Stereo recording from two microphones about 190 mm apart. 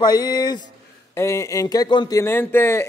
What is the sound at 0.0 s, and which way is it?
A man's voice, 20° left (ahead or behind).